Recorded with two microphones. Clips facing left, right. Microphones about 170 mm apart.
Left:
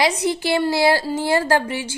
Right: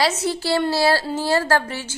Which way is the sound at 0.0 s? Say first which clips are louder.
Left 2 dB; 15° left (ahead or behind).